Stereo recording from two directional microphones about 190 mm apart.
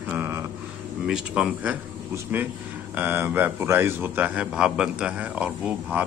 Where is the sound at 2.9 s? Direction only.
10° right (ahead or behind).